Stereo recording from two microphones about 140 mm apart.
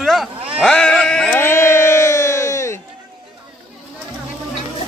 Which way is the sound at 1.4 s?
15° left (ahead or behind).